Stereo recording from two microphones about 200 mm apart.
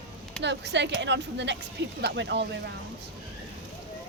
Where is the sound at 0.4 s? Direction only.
60° right (ahead or behind).